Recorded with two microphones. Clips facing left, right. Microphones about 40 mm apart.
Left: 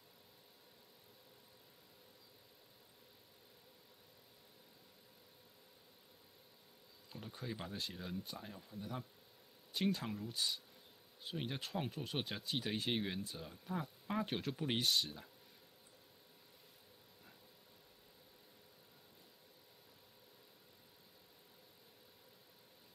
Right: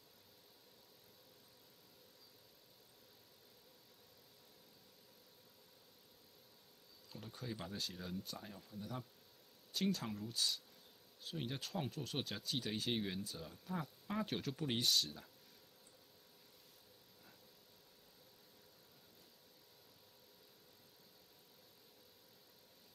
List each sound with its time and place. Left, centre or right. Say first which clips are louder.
7.1 s speech: left 1 dB; centre